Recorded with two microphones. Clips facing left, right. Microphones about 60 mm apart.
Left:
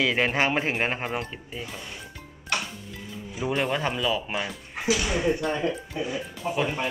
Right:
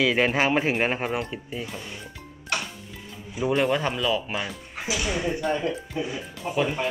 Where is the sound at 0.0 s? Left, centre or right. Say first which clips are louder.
Right 2 dB; centre.